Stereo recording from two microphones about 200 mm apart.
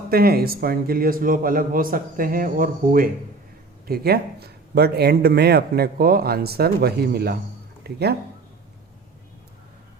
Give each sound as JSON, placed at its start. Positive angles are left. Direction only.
{"t": 0.1, "sound": "speech", "side_deg": -50}